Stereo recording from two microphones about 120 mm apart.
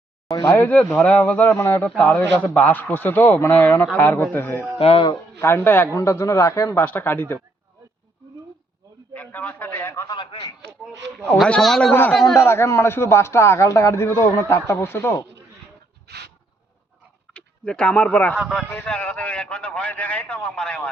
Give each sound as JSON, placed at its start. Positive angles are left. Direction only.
{"t": 0.3, "sound": "a sound", "side_deg": 35}
{"t": 0.5, "sound": "a man's voice", "side_deg": 15}
{"t": 4.8, "sound": "speech", "side_deg": 55}
{"t": 5.4, "sound": "a man's voice", "side_deg": 20}
{"t": 6.7, "sound": "a man's voice", "side_deg": 15}
{"t": 9.1, "sound": "a man's voice", "side_deg": 15}
{"t": 11.4, "sound": "a man's voice", "side_deg": 5}
{"t": 17.3, "sound": "speech", "side_deg": 10}
{"t": 18.3, "sound": "speech", "side_deg": 0}
{"t": 18.7, "sound": "a man's voice", "side_deg": 10}